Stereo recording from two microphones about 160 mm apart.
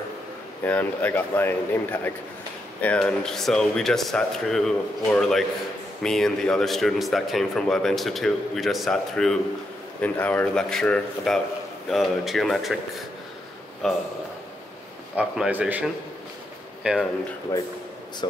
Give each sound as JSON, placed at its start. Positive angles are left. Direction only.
{"t": 0.7, "sound": "speech", "side_deg": 10}
{"t": 13.8, "sound": "speech", "side_deg": 0}
{"t": 15.1, "sound": "speech", "side_deg": -5}
{"t": 17.5, "sound": "speech", "side_deg": 15}